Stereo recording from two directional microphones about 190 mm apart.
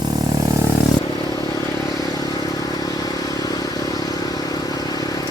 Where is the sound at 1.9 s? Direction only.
20° left (ahead or behind).